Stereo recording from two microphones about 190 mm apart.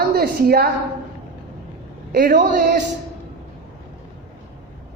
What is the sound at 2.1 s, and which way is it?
Speech, 45° right (ahead or behind).